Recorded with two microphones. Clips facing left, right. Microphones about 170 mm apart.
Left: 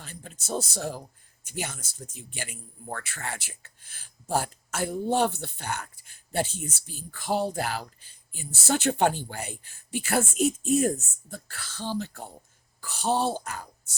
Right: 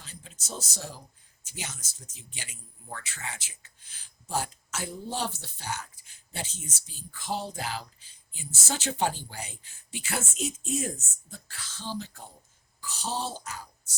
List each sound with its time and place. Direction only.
0.0 s speech: 55° left (ahead or behind)